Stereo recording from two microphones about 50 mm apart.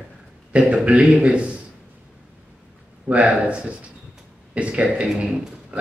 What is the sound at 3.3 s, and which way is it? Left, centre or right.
Speech, right.